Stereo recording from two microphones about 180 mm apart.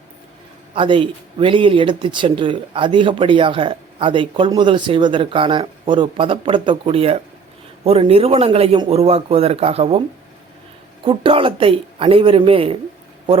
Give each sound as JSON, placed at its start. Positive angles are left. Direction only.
{"t": 0.7, "sound": "speech", "side_deg": -30}
{"t": 11.0, "sound": "speech", "side_deg": -30}